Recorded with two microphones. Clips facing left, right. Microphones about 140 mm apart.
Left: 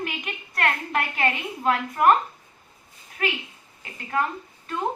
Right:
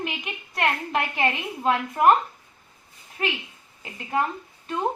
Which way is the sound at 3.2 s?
25° right (ahead or behind).